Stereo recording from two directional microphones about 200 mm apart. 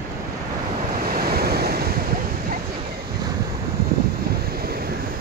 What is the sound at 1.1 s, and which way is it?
Waves, 50° right (ahead or behind).